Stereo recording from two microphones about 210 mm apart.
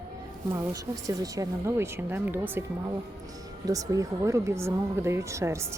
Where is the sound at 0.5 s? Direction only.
15° right (ahead or behind).